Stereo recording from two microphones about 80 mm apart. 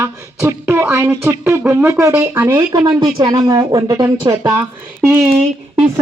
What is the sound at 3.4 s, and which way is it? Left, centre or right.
Speech, right.